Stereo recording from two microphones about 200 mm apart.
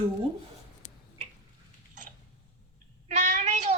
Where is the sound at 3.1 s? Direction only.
40° right (ahead or behind).